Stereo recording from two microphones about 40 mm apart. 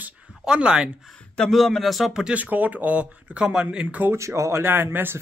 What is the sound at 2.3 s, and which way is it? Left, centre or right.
Speech, right.